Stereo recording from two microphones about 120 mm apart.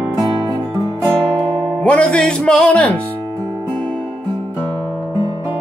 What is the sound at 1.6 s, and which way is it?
Music, 10° left (ahead or behind).